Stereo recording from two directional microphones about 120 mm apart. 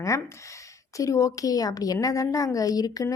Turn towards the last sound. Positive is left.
turn(degrees=30)  # may be behind; listen again after turning